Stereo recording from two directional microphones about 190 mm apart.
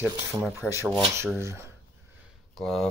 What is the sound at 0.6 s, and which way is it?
Speech, 10° left (ahead or behind).